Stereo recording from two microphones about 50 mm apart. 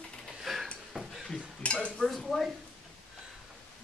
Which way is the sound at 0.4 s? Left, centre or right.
Centre.